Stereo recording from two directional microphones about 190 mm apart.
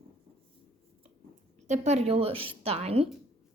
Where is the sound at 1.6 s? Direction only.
35° right (ahead or behind).